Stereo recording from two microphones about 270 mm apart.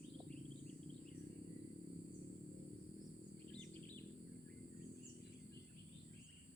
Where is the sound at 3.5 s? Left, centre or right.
Centre.